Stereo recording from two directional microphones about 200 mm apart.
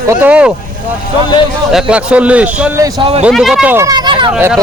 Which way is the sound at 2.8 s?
25° right (ahead or behind).